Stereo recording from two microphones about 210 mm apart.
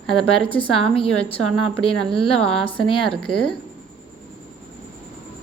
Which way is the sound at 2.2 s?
5° left (ahead or behind).